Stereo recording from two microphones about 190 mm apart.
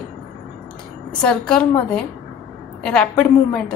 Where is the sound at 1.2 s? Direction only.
5° left (ahead or behind).